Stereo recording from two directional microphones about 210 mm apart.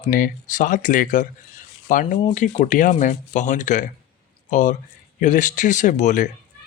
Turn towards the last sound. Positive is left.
turn(degrees=35)  # may be behind; listen again after turning